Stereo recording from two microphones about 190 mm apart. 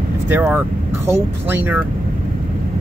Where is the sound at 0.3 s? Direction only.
10° right (ahead or behind).